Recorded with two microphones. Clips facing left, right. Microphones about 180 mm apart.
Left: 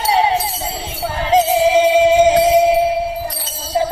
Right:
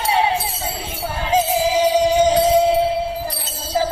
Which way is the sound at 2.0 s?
25° left (ahead or behind).